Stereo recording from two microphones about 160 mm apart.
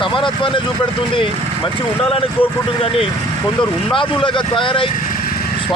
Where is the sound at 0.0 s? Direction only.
30° left (ahead or behind).